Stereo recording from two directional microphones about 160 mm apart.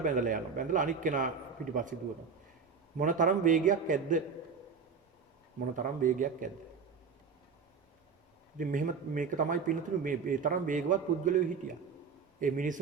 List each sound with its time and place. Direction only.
0.0 s speech: 55° right (ahead or behind)
3.0 s speech: 55° right (ahead or behind)
5.7 s speech: 55° right (ahead or behind)
8.5 s speech: 55° right (ahead or behind)
12.4 s speech: 55° right (ahead or behind)